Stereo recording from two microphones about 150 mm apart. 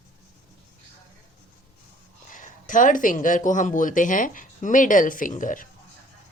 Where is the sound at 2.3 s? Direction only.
60° left (ahead or behind).